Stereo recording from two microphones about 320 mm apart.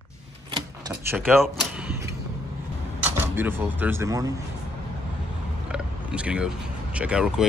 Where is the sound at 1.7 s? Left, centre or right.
Centre.